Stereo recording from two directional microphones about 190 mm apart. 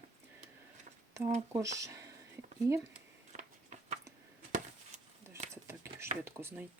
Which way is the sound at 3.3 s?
40° right (ahead or behind).